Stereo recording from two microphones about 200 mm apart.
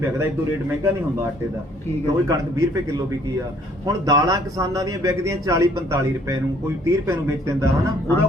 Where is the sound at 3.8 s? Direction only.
20° right (ahead or behind).